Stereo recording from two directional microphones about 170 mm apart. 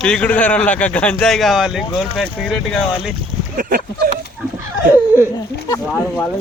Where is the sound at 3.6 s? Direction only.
55° right (ahead or behind).